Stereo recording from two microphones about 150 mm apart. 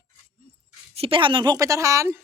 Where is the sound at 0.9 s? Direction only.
40° right (ahead or behind); by 2.2 s 20° right (ahead or behind).